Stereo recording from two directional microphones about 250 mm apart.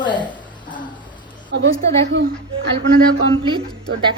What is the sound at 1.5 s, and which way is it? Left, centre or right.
Speech, right.